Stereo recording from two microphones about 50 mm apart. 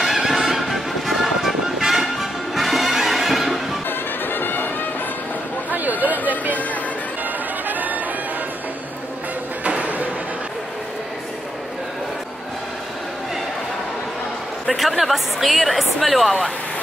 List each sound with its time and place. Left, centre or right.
0.0 s music: centre
4.3 s music: left
5.7 s chatter: right
7.6 s bagpipes: right
9.7 s a sound: right
14.7 s a woman's voice: centre